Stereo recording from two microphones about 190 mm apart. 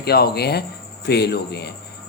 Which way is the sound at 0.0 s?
55° left (ahead or behind).